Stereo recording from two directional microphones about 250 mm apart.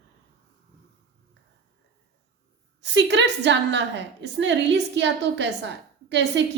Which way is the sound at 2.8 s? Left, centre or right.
Right.